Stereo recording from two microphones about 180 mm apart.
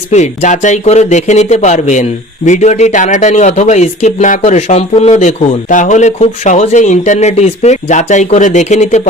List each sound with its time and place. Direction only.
0.1 s speech: 40° left (ahead or behind)